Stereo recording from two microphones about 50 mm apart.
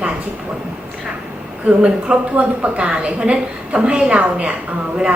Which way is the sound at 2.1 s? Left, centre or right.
Right.